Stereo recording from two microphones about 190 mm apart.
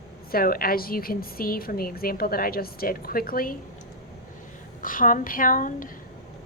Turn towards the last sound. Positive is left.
turn(degrees=45)  # may be behind; listen again after turning